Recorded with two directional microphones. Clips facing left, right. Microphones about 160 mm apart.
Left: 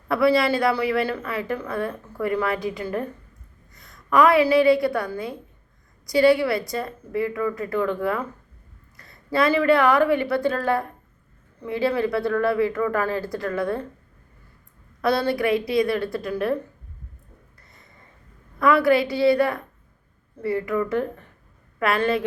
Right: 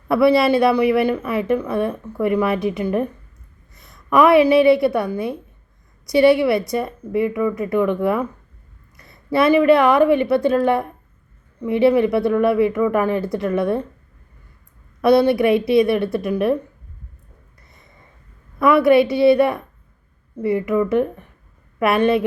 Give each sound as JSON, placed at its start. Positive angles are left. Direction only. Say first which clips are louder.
{"t": 0.1, "sound": "a woman's voice", "louder": "right 5 dB", "side_deg": -25}
{"t": 15.0, "sound": "a woman's voice", "louder": "right 7 dB", "side_deg": -20}
{"t": 18.6, "sound": "a woman's voice", "louder": "right 5 dB", "side_deg": -25}